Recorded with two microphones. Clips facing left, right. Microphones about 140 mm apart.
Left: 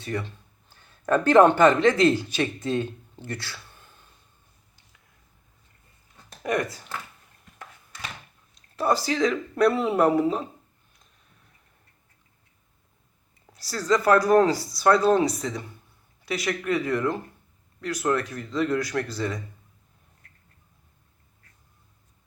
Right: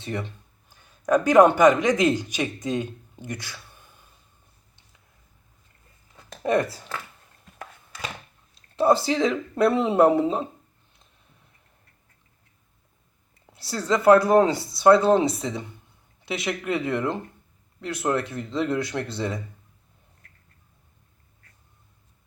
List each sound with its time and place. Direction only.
0.0 s speech: 20° right (ahead or behind)
6.4 s speech: 30° right (ahead or behind)
8.7 s speech: 25° right (ahead or behind)
13.5 s speech: 25° right (ahead or behind)